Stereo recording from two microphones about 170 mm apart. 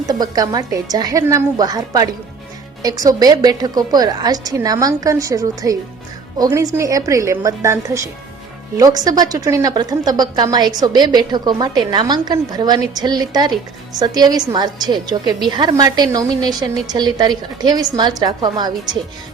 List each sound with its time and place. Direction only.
0.1 s a woman's voice: 20° right (ahead or behind)